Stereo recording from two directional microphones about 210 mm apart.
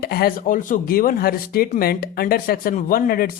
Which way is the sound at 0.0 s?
45° left (ahead or behind).